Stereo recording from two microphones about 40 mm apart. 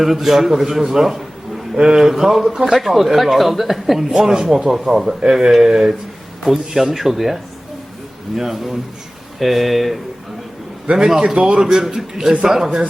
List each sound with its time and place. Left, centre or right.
0.0 s a man's voice: centre
2.7 s a man's voice: centre
10.9 s a man's voice: centre
11.3 s speech: right
11.6 s a man's voice: centre